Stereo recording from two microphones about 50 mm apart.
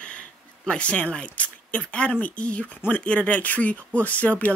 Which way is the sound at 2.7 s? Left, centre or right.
Left.